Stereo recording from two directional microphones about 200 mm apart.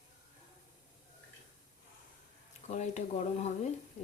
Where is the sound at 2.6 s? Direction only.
35° left (ahead or behind).